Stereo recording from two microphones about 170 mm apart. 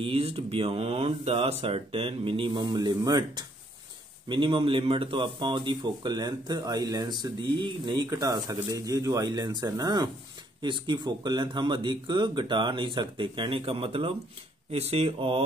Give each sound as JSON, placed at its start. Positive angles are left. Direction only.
{"t": 0.0, "sound": "a man's voice", "side_deg": -35}